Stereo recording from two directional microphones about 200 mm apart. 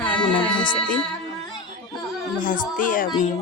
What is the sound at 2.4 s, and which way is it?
Speech, 40° left (ahead or behind).